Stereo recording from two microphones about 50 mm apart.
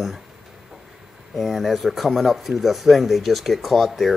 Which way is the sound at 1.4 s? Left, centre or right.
Centre.